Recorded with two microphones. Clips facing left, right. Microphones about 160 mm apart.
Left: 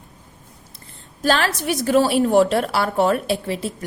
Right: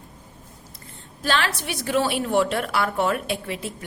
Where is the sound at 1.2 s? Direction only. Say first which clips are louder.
Left 5 dB; 40° left (ahead or behind).